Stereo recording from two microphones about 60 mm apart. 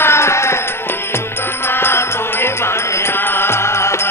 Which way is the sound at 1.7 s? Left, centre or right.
Left.